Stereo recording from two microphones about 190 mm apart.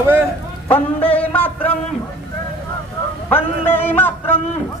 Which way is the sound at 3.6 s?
10° left (ahead or behind).